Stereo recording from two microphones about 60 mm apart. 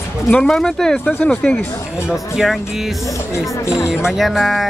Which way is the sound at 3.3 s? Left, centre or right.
Left.